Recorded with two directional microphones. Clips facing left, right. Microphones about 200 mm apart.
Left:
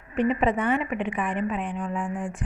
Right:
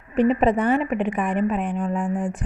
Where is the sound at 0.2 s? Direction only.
35° right (ahead or behind).